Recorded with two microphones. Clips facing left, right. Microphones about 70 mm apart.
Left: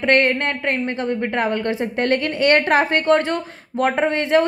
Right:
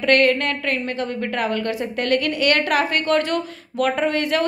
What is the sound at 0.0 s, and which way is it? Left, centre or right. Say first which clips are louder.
A woman's voice: even; left.